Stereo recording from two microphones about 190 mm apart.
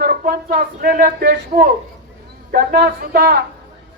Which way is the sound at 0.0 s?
50° right (ahead or behind).